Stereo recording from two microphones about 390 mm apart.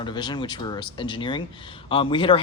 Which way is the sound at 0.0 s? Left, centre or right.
Centre.